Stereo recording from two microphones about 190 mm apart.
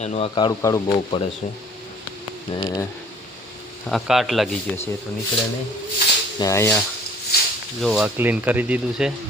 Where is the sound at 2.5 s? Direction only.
15° left (ahead or behind).